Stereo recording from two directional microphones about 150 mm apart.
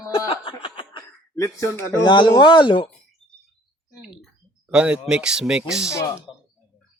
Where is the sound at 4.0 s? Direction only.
5° right (ahead or behind).